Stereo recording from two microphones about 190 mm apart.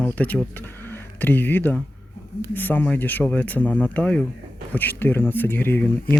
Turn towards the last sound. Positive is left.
turn(degrees=10)  # may be behind; listen again after turning